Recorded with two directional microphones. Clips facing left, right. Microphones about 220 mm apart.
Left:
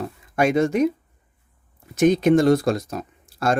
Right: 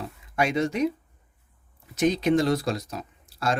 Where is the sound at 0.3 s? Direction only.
50° left (ahead or behind).